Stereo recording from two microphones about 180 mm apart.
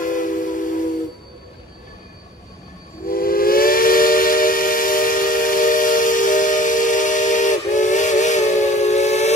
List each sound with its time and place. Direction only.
0.0 s train: 45° left (ahead or behind)
3.1 s steam whistle: 55° left (ahead or behind)